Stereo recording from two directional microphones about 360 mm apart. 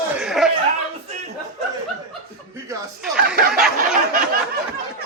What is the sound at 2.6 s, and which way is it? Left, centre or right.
Snicker, centre.